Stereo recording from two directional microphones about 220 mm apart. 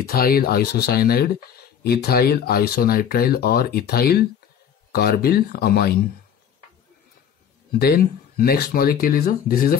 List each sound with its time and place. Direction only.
0.0 s speech: 40° left (ahead or behind)
7.8 s speech: 45° left (ahead or behind)